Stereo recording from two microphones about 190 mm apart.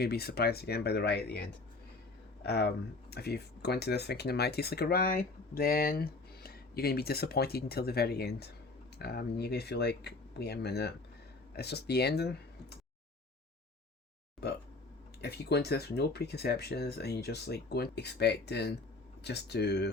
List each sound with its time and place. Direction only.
0.0 s speech: 55° left (ahead or behind)
14.4 s speech: 60° left (ahead or behind)